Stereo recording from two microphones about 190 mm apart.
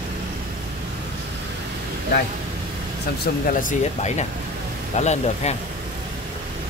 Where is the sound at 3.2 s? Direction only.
45° left (ahead or behind).